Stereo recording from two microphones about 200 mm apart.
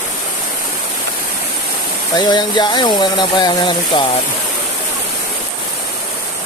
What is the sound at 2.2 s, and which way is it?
Speech, 20° left (ahead or behind).